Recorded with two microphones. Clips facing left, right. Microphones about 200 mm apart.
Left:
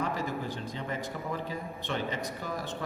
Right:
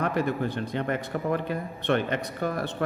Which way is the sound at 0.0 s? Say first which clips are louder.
Right 6 dB; 65° right (ahead or behind).